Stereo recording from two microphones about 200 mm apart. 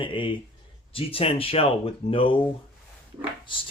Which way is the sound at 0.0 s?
25° left (ahead or behind).